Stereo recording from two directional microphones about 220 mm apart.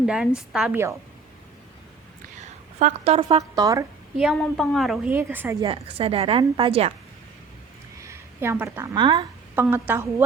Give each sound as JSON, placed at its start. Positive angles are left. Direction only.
{"t": 0.0, "sound": "a woman's voice", "side_deg": -5}
{"t": 2.7, "sound": "a woman's voice", "side_deg": -30}
{"t": 4.2, "sound": "a woman's voice", "side_deg": 0}
{"t": 5.6, "sound": "a woman's voice", "side_deg": -25}
{"t": 8.0, "sound": "a woman's voice", "side_deg": -10}